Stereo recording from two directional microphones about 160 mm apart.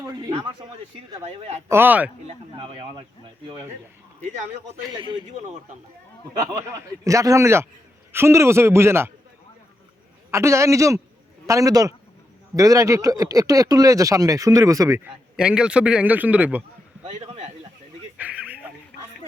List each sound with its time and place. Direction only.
0.0 s a sound: 25° right (ahead or behind)
1.2 s speech: 40° right (ahead or behind)
1.6 s a man's voice: 15° right (ahead or behind)
2.2 s speech: 35° right (ahead or behind)
4.8 s speech: 25° right (ahead or behind)
6.3 s a man's voice: 20° right (ahead or behind)
10.3 s a man's voice: 20° right (ahead or behind)
15.4 s a man's voice: 5° right (ahead or behind)
17.0 s a sound: 45° right (ahead or behind)
18.2 s a sound: 10° right (ahead or behind)